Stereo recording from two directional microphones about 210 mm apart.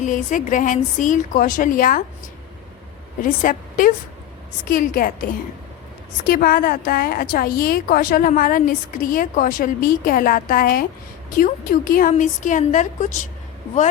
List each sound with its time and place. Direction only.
0.0 s a woman's voice: 35° left (ahead or behind)
3.2 s a woman's voice: 40° left (ahead or behind)